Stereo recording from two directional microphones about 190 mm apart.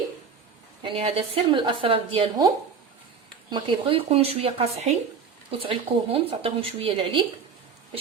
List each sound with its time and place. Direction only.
0.8 s speech: 30° right (ahead or behind)
3.5 s speech: 25° right (ahead or behind)